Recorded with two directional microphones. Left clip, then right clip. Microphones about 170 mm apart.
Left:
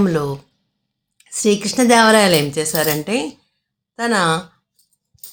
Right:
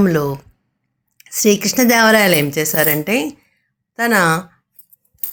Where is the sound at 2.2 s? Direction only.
20° right (ahead or behind).